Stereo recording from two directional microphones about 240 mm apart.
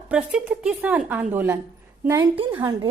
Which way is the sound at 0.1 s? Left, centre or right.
Centre.